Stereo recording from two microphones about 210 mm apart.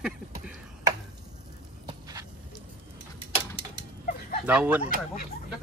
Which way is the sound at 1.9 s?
15° right (ahead or behind).